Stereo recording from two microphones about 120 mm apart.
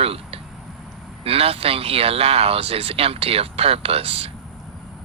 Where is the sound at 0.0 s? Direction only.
55° right (ahead or behind).